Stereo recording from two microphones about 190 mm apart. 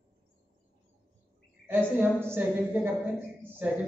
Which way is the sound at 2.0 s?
10° right (ahead or behind).